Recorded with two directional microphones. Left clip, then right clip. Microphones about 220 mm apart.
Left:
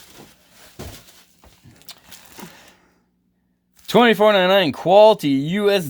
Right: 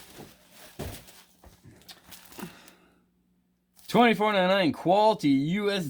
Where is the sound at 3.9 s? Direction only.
35° left (ahead or behind).